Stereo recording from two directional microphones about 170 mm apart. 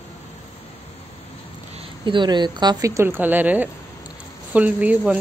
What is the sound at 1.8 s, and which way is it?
A woman's voice, 30° right (ahead or behind).